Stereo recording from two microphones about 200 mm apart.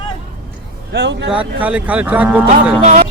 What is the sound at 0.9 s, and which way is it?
Speech, 60° right (ahead or behind).